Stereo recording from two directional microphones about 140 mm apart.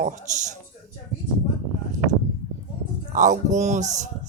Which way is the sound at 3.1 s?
60° right (ahead or behind).